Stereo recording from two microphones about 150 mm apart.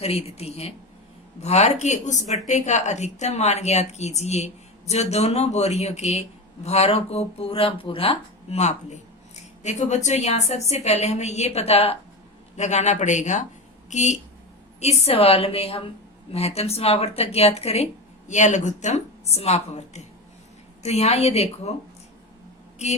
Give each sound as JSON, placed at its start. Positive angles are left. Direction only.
{"t": 0.0, "sound": "a woman's voice", "side_deg": 40}
{"t": 22.8, "sound": "speech", "side_deg": 50}